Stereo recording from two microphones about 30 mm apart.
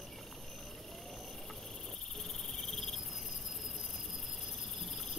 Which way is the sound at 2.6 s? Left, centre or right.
Centre.